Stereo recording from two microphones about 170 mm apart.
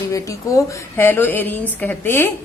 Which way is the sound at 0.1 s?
20° left (ahead or behind).